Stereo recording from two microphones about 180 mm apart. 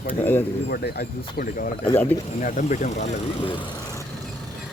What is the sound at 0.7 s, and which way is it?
Speech, 65° left (ahead or behind).